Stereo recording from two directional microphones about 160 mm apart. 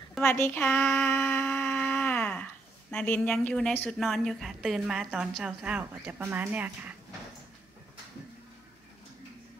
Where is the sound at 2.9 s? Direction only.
10° left (ahead or behind); by 6.9 s 10° right (ahead or behind).